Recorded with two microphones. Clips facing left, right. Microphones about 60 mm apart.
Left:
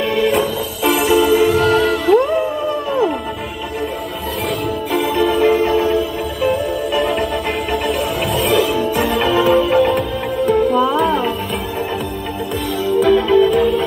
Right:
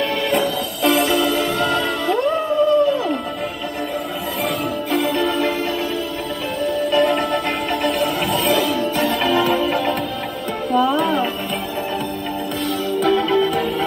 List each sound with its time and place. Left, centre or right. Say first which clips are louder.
0.1 s music: left 3 dB; centre
4.9 s music: left 3 dB; centre
5.4 s music: left 7 dB; left
6.9 s music: right 2 dB; centre
13.0 s music: left 5 dB; centre